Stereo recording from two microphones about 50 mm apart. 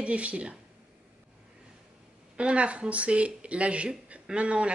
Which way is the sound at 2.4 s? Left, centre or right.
Right.